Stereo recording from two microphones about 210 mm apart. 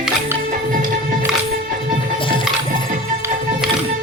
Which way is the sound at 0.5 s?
40° right (ahead or behind).